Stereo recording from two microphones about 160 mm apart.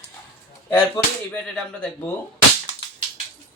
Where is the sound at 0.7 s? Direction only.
15° left (ahead or behind).